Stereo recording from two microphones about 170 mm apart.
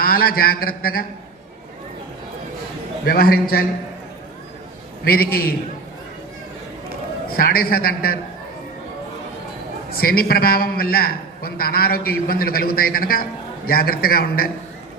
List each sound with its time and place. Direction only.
0.0 s a man's voice: 60° left (ahead or behind)
3.1 s a man's voice: 60° left (ahead or behind)
5.0 s a man's voice: 65° left (ahead or behind)
7.3 s a man's voice: 60° left (ahead or behind)
9.9 s a man's voice: 60° left (ahead or behind)